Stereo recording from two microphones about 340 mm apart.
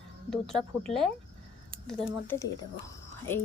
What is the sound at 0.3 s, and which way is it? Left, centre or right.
A woman's voice, centre.